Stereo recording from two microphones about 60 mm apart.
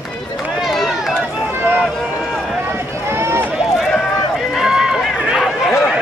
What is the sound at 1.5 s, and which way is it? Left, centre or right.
Run, right.